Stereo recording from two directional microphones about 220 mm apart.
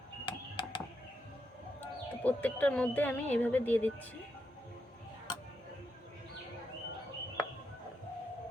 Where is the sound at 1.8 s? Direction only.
10° left (ahead or behind).